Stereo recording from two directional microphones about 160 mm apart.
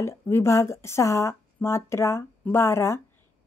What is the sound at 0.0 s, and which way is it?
A woman's voice, 15° left (ahead or behind).